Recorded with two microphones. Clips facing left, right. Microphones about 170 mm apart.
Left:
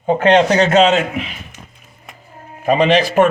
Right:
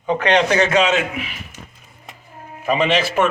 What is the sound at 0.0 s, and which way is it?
Speech, 45° left (ahead or behind).